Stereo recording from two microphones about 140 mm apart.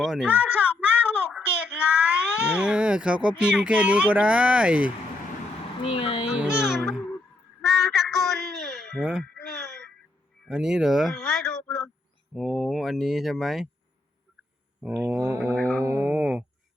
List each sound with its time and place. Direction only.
0.0 s speech: centre (ahead or behind)
0.3 s a sound: 10° right (ahead or behind)
2.6 s speech: 5° right (ahead or behind)
5.8 s speech: 40° left (ahead or behind)
6.2 s speech: 5° right (ahead or behind)
7.6 s a sound: centre (ahead or behind)
10.4 s speech: 5° right (ahead or behind)
15.0 s speech: 20° right (ahead or behind)